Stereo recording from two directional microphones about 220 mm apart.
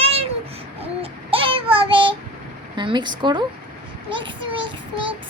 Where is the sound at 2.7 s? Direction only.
20° right (ahead or behind).